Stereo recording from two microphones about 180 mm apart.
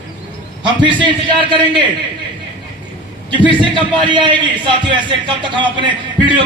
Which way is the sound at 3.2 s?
25° right (ahead or behind).